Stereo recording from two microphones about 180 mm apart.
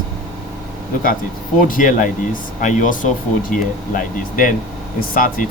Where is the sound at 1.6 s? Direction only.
45° left (ahead or behind).